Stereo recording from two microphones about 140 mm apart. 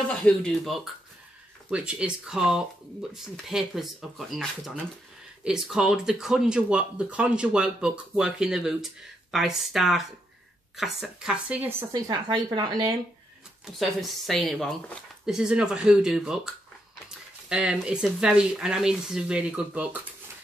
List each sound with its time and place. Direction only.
0.1 s speech: 5° left (ahead or behind)
11.9 s speech: 30° right (ahead or behind)
13.7 s speech: centre (ahead or behind)
17.5 s speech: 5° right (ahead or behind)